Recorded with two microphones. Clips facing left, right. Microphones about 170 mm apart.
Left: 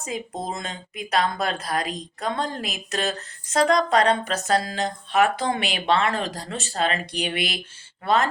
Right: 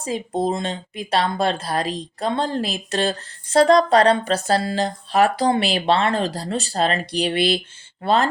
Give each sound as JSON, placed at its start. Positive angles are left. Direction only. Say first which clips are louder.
{"t": 0.0, "sound": "speech", "louder": "right 8 dB", "side_deg": -30}